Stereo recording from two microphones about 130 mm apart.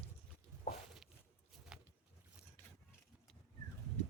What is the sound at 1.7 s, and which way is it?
Patter, 5° right (ahead or behind).